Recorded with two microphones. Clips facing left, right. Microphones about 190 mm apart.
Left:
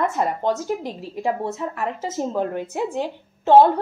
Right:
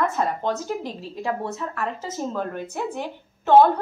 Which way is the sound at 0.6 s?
20° left (ahead or behind).